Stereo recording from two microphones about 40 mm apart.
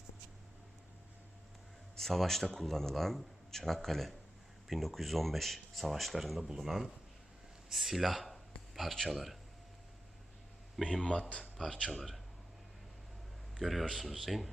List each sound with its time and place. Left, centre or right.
2.0 s speech: centre
11.0 s speech: left
11.5 s speech: centre
13.6 s speech: centre